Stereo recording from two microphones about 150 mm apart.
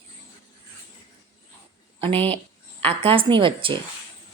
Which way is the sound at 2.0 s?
40° right (ahead or behind).